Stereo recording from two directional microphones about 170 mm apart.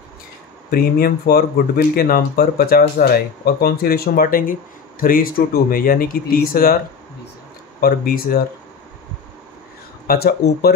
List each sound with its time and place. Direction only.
0.7 s speech: 60° left (ahead or behind)
7.8 s speech: 60° left (ahead or behind)
10.0 s speech: 65° left (ahead or behind)